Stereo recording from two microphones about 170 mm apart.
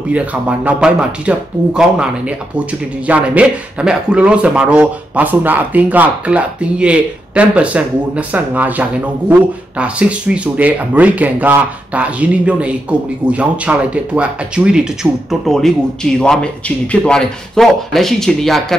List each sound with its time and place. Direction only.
0.1 s speech: 10° right (ahead or behind)